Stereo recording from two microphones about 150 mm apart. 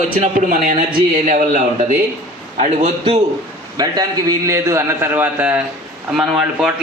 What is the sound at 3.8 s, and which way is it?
A man's voice, 25° right (ahead or behind).